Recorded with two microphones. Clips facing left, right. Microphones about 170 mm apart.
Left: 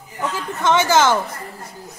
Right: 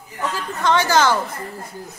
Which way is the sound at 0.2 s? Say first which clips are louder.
Left 1 dB; 20° left (ahead or behind).